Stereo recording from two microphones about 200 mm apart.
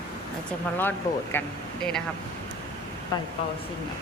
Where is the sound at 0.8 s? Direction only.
10° left (ahead or behind).